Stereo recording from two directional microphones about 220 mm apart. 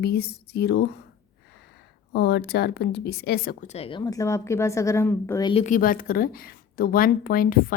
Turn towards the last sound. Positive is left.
turn(degrees=40)  # may be behind; listen again after turning